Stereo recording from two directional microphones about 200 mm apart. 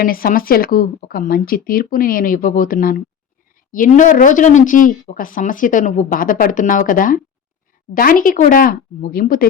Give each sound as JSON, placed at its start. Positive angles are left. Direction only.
{"t": 0.0, "sound": "speech", "side_deg": 45}